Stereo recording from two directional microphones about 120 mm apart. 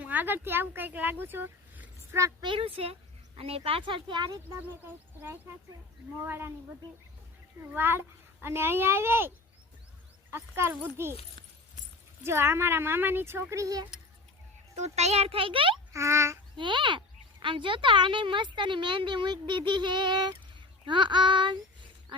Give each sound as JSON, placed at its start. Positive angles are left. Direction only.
{"t": 0.0, "sound": "speech", "side_deg": -15}
{"t": 2.4, "sound": "speech", "side_deg": -45}
{"t": 6.2, "sound": "speech", "side_deg": -20}
{"t": 7.7, "sound": "speech", "side_deg": -15}
{"t": 10.3, "sound": "speech", "side_deg": -20}
{"t": 12.2, "sound": "speech", "side_deg": -20}
{"t": 14.8, "sound": "a child's voice", "side_deg": -65}
{"t": 15.9, "sound": "speech", "side_deg": -25}
{"t": 16.6, "sound": "speech", "side_deg": -45}